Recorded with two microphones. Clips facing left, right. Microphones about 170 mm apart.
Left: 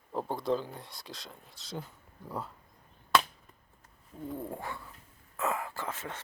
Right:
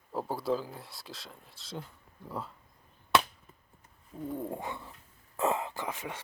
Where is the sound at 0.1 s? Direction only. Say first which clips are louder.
Even; 5° right (ahead or behind).